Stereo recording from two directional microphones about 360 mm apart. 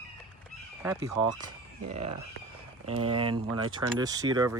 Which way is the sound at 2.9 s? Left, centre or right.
Right.